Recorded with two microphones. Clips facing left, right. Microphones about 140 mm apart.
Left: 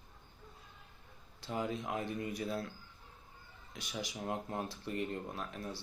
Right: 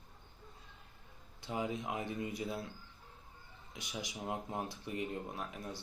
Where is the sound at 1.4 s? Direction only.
20° right (ahead or behind).